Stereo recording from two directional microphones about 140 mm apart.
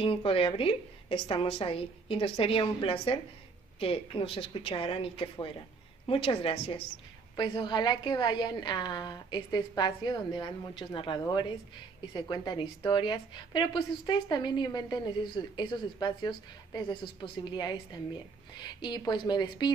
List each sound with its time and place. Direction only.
0.0 s a woman's voice: 40° left (ahead or behind)